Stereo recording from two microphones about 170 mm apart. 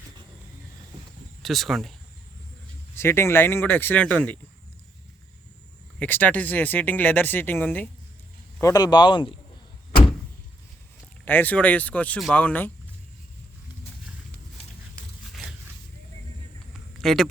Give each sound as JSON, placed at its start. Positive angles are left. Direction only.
{"t": 1.4, "sound": "speech", "side_deg": 0}
{"t": 2.9, "sound": "speech", "side_deg": 15}
{"t": 6.0, "sound": "speech", "side_deg": 10}
{"t": 8.6, "sound": "speech", "side_deg": 25}
{"t": 11.3, "sound": "speech", "side_deg": 10}
{"t": 15.3, "sound": "zipper", "side_deg": 0}
{"t": 17.0, "sound": "speech", "side_deg": 0}